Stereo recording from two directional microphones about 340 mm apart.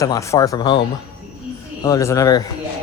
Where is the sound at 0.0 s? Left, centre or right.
Centre.